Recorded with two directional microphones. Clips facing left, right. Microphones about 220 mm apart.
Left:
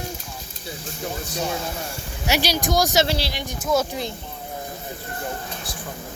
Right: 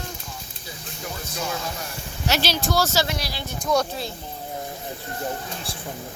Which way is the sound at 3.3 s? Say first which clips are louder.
Left 2 dB; 15° left (ahead or behind).